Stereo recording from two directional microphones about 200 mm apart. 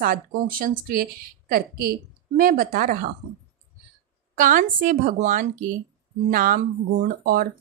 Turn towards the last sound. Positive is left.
turn(degrees=-45)  # may be behind; listen again after turning